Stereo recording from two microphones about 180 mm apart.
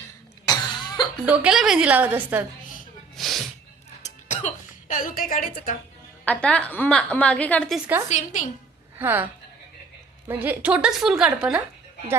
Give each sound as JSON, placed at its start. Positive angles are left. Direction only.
{"t": 0.4, "sound": "cough", "side_deg": 25}
{"t": 1.2, "sound": "a woman's voice", "side_deg": -10}
{"t": 3.2, "sound": "sneeze", "side_deg": 0}
{"t": 4.0, "sound": "music", "side_deg": 40}
{"t": 6.2, "sound": "a woman's voice", "side_deg": 5}
{"t": 8.0, "sound": "a woman's voice", "side_deg": 40}
{"t": 9.0, "sound": "a woman's voice", "side_deg": -10}
{"t": 10.2, "sound": "a woman's voice", "side_deg": -10}